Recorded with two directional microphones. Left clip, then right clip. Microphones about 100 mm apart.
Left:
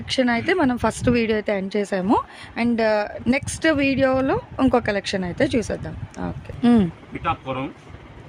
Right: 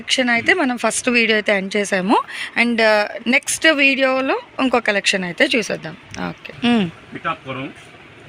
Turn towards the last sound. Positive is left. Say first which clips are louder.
# even
turn(degrees=60)  # may be behind; listen again after turning